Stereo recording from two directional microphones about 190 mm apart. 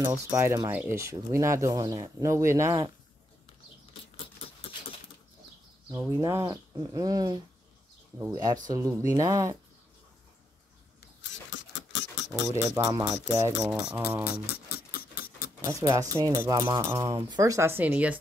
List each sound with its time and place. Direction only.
0.0 s speech: 10° right (ahead or behind)
5.9 s speech: 15° right (ahead or behind)
11.5 s a sound: 70° left (ahead or behind)
12.7 s speech: 20° right (ahead or behind)
14.5 s patter: 55° left (ahead or behind)
15.6 s speech: 15° right (ahead or behind)